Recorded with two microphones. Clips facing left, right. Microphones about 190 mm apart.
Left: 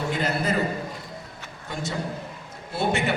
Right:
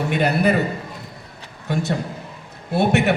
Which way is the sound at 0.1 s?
65° right (ahead or behind).